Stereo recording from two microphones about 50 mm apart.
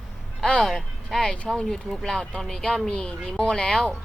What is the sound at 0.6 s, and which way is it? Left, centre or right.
Speech, centre.